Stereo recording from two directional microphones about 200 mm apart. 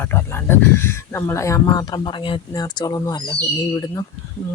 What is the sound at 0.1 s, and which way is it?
Speech, 10° left (ahead or behind).